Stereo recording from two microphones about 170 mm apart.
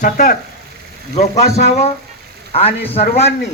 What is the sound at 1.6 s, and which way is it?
A man's voice, 40° left (ahead or behind).